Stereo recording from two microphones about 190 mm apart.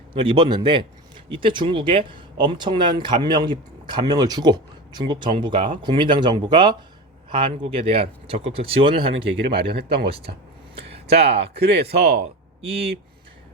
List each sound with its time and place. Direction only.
0.1 s a man's voice: 25° right (ahead or behind)
9.5 s speech: 60° right (ahead or behind)
10.8 s a sound: 30° right (ahead or behind)
11.2 s speech: 30° right (ahead or behind)
11.5 s speech: 60° right (ahead or behind)
12.2 s a sound: 30° right (ahead or behind)